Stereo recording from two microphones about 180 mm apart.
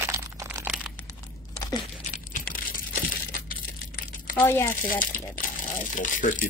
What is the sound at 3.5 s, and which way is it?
Crumpling, 50° left (ahead or behind).